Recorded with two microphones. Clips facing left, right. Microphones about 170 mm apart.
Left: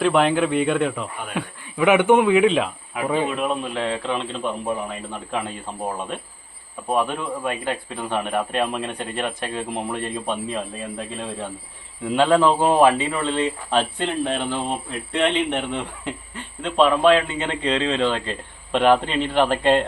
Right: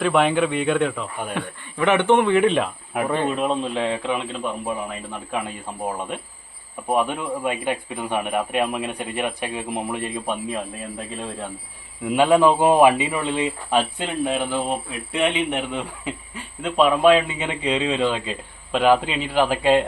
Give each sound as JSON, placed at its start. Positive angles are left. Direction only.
{"t": 0.0, "sound": "a man's voice", "side_deg": 0}
{"t": 3.2, "sound": "speech", "side_deg": -30}
{"t": 12.0, "sound": "speech", "side_deg": -10}